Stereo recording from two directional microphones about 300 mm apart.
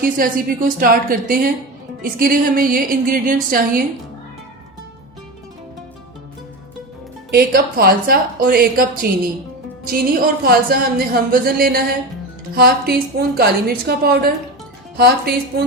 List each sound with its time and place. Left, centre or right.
0.0 s music: right
7.3 s music: right
12.5 s a woman's voice: right